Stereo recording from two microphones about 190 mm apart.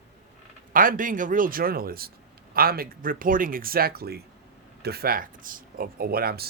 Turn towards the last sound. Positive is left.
turn(degrees=-55)  # may be behind; listen again after turning